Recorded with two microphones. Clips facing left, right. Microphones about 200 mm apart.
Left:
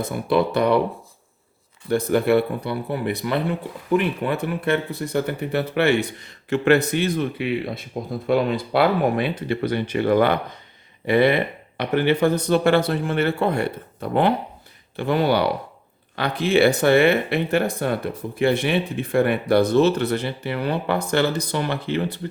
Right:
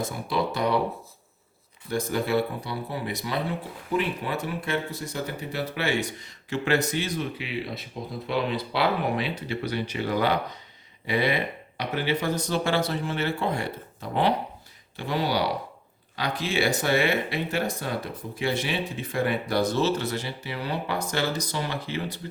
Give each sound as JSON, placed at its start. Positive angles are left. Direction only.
{"t": 0.0, "sound": "speech", "side_deg": 60}
{"t": 1.9, "sound": "speech", "side_deg": 60}